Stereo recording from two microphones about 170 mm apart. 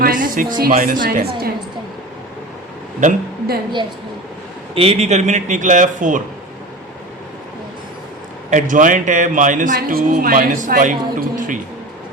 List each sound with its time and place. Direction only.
0.0 s music: 55° right (ahead or behind)
0.6 s speech: 60° right (ahead or behind)
3.0 s a man's voice: 55° right (ahead or behind)
4.7 s a man's voice: 35° right (ahead or behind)
8.4 s a man's voice: 50° right (ahead or behind)